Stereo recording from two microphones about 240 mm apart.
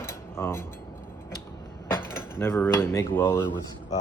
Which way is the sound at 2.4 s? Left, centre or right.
Centre.